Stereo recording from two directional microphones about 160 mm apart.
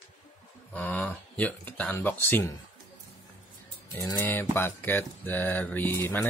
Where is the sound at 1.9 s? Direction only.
15° left (ahead or behind).